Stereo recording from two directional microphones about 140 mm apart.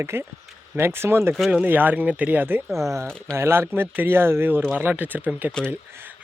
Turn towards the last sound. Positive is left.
turn(degrees=-15)  # may be behind; listen again after turning